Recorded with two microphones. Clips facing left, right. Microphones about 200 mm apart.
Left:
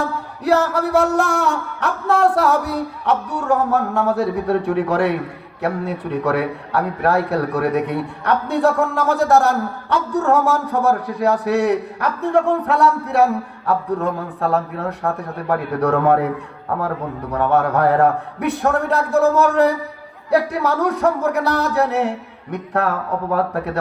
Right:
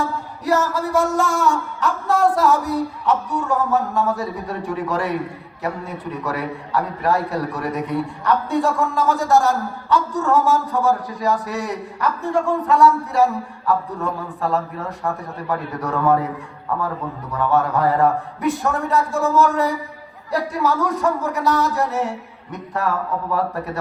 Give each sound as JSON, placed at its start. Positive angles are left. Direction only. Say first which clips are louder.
{"t": 0.0, "sound": "a man's voice", "louder": "left 2 dB", "side_deg": 60}
{"t": 17.3, "sound": "a man's voice", "louder": "left 2 dB", "side_deg": 65}